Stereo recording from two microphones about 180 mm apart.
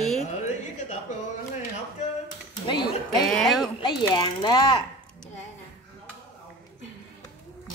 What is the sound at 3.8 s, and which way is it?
Ratchet, 25° left (ahead or behind).